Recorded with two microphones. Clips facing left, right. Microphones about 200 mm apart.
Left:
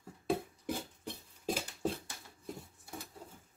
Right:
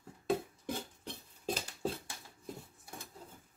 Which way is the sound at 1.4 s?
10° left (ahead or behind).